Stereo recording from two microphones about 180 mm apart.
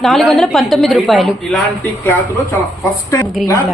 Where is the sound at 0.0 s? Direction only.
Centre (ahead or behind).